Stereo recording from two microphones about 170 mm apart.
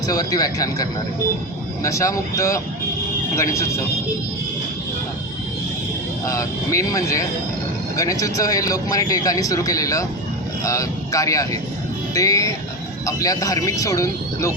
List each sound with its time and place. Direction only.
0.1 s speech: 20° left (ahead or behind)
6.2 s speech: 20° left (ahead or behind)